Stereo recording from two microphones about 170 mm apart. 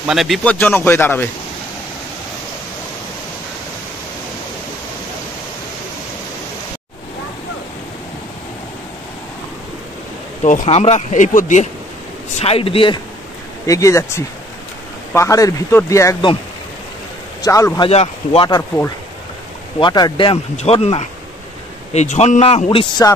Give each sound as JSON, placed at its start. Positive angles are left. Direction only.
{"t": 0.0, "sound": "speech", "side_deg": 0}
{"t": 10.4, "sound": "speech", "side_deg": 45}
{"t": 12.4, "sound": "speech", "side_deg": 35}
{"t": 13.7, "sound": "speech", "side_deg": 20}
{"t": 17.4, "sound": "speech", "side_deg": 20}
{"t": 17.8, "sound": "speech", "side_deg": 35}
{"t": 19.8, "sound": "speech", "side_deg": 25}